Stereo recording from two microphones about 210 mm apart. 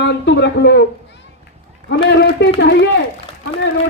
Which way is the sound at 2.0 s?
55° left (ahead or behind).